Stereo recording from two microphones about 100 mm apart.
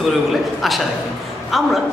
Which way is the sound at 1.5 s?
Centre (ahead or behind).